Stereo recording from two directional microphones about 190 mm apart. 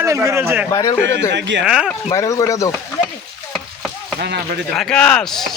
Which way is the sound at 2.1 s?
15° left (ahead or behind).